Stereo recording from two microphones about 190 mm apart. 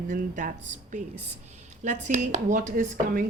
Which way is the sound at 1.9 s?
40° right (ahead or behind).